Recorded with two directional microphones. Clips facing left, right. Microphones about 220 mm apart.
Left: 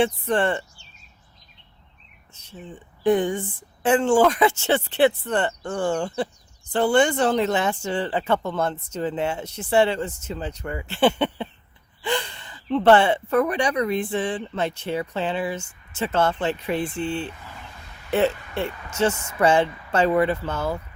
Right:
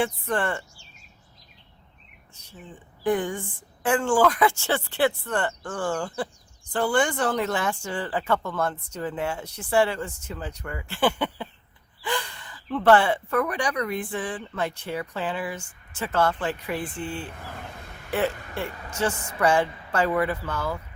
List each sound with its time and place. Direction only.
0.0 s speech: 25° left (ahead or behind)
2.3 s speech: 25° left (ahead or behind)
17.3 s speech: 55° right (ahead or behind)
18.1 s speech: 25° left (ahead or behind)